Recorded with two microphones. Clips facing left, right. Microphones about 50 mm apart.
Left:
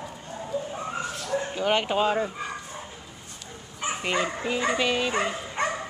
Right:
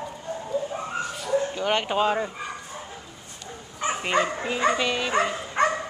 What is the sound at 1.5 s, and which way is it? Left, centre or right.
Speech, centre.